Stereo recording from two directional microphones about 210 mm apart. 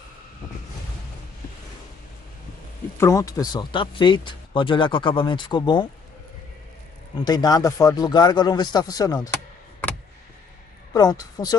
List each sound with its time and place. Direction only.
3.0 s speech: 15° left (ahead or behind)
7.2 s a man's voice: 20° left (ahead or behind)
10.9 s a man's voice: 20° left (ahead or behind)